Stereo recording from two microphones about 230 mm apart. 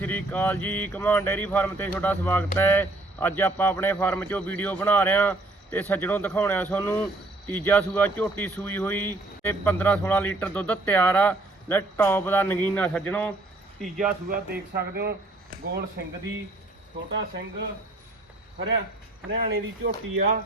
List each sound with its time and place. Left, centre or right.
0.0 s speech: centre
14.3 s speech: right
17.1 s speech: right
19.3 s speech: right